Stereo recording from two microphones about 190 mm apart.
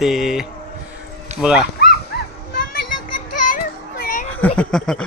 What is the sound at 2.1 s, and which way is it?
Children playing, 55° left (ahead or behind).